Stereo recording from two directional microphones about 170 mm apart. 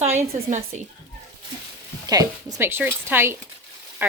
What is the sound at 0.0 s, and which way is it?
Speech, 40° right (ahead or behind).